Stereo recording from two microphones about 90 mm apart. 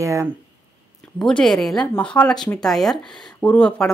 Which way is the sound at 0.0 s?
35° right (ahead or behind).